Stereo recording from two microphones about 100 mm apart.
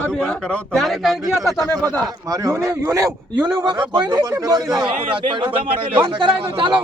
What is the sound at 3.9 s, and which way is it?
A woman's voice, 50° right (ahead or behind).